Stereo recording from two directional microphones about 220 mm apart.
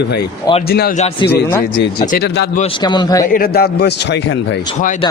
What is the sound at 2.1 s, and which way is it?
Speech, 50° left (ahead or behind).